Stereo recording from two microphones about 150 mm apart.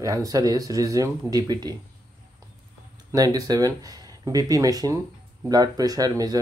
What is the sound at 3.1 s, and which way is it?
Speech, 25° right (ahead or behind).